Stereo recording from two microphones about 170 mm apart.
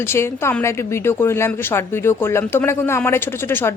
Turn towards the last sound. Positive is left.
turn(degrees=15)  # may be behind; listen again after turning